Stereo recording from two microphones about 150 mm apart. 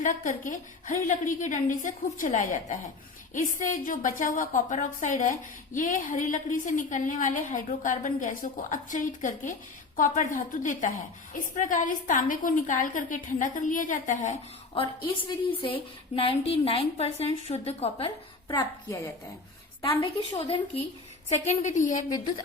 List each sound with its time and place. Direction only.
0.0 s a woman's voice: 60° left (ahead or behind)
14.8 s a woman's voice: 35° left (ahead or behind)
19.8 s a woman's voice: 40° left (ahead or behind)
21.2 s a woman's voice: 50° left (ahead or behind)